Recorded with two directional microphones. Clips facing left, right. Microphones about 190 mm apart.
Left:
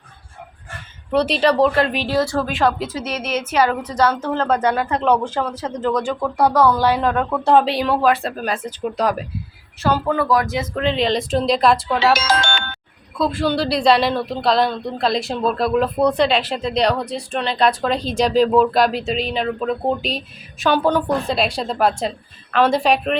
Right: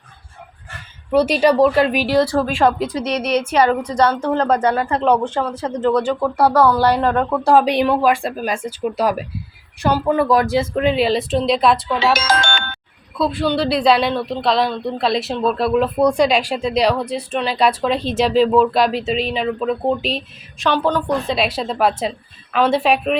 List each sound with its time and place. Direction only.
1.1 s speech: 10° right (ahead or behind)
2.3 s speech: 30° right (ahead or behind)
2.6 s speech: centre (ahead or behind)
4.0 s speech: 30° right (ahead or behind)
6.1 s speech: 10° right (ahead or behind)
6.8 s a woman's voice: 10° left (ahead or behind)
7.3 s speech: 10° right (ahead or behind); by 10.7 s 30° right (ahead or behind)
10.8 s speech: 10° right (ahead or behind)
12.1 s music: 50° right (ahead or behind)
13.1 s speech: centre (ahead or behind)